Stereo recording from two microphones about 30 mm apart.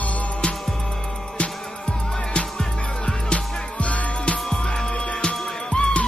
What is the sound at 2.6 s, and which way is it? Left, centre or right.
Music, left.